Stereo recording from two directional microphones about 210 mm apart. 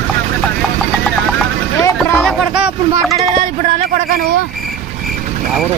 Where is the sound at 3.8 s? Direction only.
45° right (ahead or behind).